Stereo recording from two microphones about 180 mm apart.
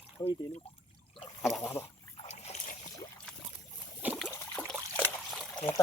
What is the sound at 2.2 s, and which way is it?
Boat, 35° left (ahead or behind).